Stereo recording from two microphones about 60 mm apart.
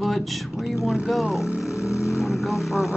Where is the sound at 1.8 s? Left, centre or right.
Left.